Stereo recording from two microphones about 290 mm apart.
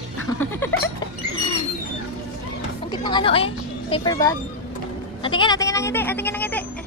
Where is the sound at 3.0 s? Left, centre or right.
Centre.